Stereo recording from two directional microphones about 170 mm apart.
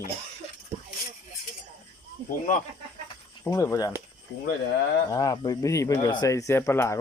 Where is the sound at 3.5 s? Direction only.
20° left (ahead or behind).